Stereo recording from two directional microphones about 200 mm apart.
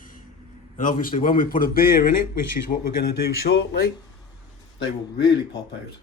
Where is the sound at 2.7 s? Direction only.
35° left (ahead or behind).